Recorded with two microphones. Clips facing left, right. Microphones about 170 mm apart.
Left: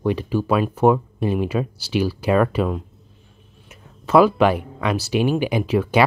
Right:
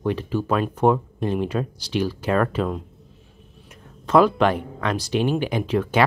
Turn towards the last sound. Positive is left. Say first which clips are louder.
# left 2 dB
turn(degrees=10)  # may be behind; listen again after turning